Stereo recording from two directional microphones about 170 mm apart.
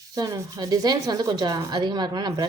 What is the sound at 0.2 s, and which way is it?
Speech, 20° right (ahead or behind).